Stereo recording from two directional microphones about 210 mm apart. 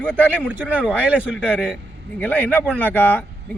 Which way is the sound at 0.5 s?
10° right (ahead or behind).